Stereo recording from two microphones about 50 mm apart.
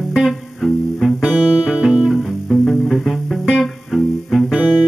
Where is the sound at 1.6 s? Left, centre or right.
Centre.